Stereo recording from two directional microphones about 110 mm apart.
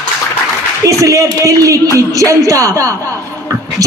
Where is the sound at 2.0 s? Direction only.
30° right (ahead or behind).